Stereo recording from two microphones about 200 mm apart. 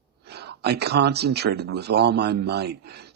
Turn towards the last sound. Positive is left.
turn(degrees=-55)  # may be behind; listen again after turning